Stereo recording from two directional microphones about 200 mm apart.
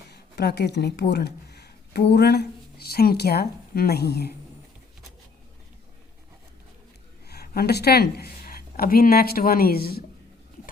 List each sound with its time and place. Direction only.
0.1 s speech: 55° left (ahead or behind)
7.3 s speech: 50° left (ahead or behind)